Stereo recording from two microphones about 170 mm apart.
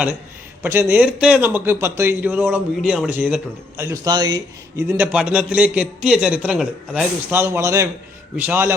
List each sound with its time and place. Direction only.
0.6 s a man's voice: 15° right (ahead or behind)
3.8 s a man's voice: 25° right (ahead or behind)
5.1 s a man's voice: 5° right (ahead or behind)